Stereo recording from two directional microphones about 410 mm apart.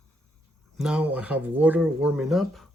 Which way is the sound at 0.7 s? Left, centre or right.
Centre.